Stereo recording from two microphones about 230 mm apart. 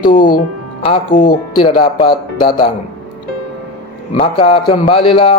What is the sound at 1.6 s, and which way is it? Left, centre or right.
Speech, left.